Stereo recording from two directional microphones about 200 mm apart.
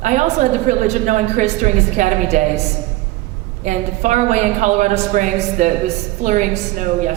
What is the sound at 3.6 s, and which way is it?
A woman's voice, 35° right (ahead or behind).